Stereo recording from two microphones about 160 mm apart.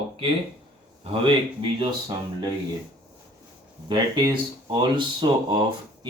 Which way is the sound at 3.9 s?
30° right (ahead or behind).